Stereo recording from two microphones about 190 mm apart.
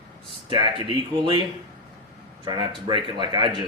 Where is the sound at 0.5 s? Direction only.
25° right (ahead or behind).